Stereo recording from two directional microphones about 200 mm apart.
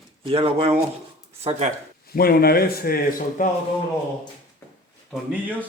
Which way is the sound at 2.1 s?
50° left (ahead or behind).